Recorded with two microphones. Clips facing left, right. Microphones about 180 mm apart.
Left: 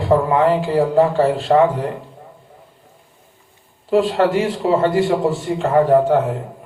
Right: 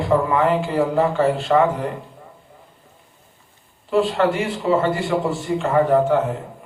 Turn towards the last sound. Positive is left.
turn(degrees=40)  # may be behind; listen again after turning